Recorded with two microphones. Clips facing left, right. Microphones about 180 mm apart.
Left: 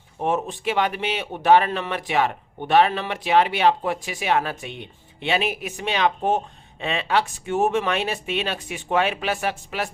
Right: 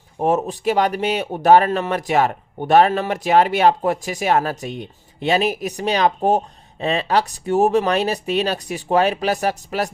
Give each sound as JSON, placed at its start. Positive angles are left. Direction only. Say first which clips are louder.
{"t": 0.2, "sound": "speech", "louder": "right 5 dB", "side_deg": -40}